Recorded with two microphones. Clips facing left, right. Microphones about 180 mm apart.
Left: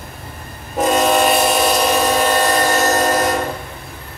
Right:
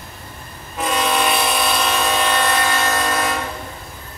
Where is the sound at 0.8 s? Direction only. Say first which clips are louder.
Left 6 dB; 45° left (ahead or behind).